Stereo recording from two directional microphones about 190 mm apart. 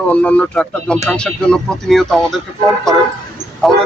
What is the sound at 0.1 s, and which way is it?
Speech, 5° left (ahead or behind).